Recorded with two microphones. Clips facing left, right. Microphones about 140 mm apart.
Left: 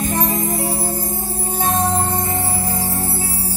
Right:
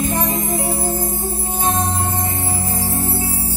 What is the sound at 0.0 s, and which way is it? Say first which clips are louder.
Music: even; 35° left (ahead or behind).